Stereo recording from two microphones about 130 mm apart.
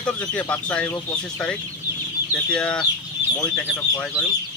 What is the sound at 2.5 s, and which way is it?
Speech, 10° left (ahead or behind).